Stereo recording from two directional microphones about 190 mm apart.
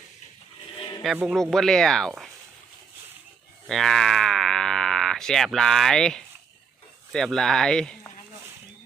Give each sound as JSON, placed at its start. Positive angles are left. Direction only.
{"t": 0.8, "sound": "music", "side_deg": 20}
{"t": 1.0, "sound": "speech", "side_deg": -5}
{"t": 3.7, "sound": "speech", "side_deg": 0}